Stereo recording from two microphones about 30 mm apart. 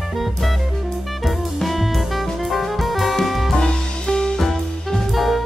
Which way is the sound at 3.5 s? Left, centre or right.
Left.